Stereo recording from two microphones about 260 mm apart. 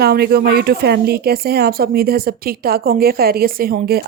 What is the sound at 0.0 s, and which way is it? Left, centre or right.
Speech, right.